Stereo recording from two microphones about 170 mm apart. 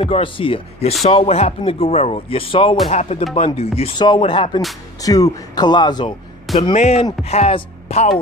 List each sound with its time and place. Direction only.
0.0 s speech: 30° left (ahead or behind)
5.0 s a man's voice: 20° left (ahead or behind)
6.7 s speech: 40° left (ahead or behind)